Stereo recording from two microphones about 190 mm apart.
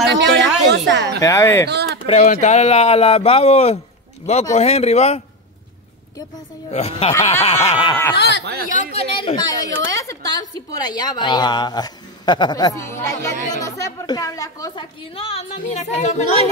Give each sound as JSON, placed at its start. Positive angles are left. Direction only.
{"t": 0.1, "sound": "a sound", "side_deg": -65}
{"t": 1.2, "sound": "speech", "side_deg": 15}
{"t": 1.7, "sound": "speech", "side_deg": -60}
{"t": 2.0, "sound": "speech", "side_deg": 35}
{"t": 6.7, "sound": "a woman's voice", "side_deg": 30}
{"t": 8.6, "sound": "speech", "side_deg": 40}
{"t": 9.2, "sound": "a woman's voice", "side_deg": 20}